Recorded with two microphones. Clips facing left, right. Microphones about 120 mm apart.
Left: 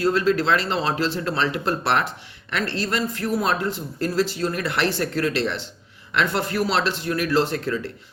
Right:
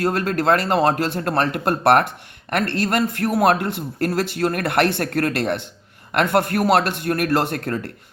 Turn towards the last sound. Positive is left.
turn(degrees=-55)  # may be behind; listen again after turning